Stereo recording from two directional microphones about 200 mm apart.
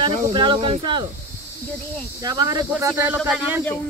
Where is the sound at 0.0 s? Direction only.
25° right (ahead or behind).